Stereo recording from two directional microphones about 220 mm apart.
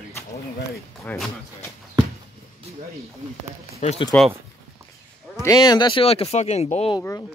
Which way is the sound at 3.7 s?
30° left (ahead or behind).